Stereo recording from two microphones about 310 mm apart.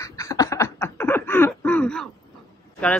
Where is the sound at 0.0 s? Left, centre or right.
Centre.